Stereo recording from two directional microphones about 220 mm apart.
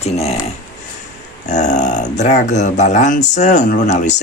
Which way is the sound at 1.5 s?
35° left (ahead or behind).